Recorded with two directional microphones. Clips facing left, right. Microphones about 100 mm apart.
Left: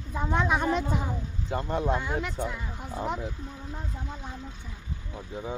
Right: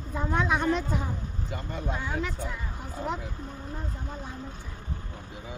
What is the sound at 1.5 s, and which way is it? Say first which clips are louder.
Speech: left 8 dB; 40° left (ahead or behind).